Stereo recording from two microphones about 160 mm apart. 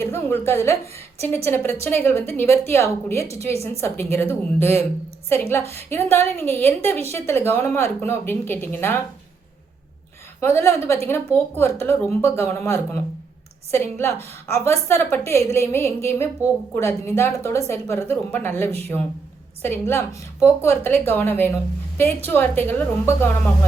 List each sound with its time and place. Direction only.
0.0 s a woman's voice: 15° left (ahead or behind)
10.4 s a woman's voice: 15° left (ahead or behind)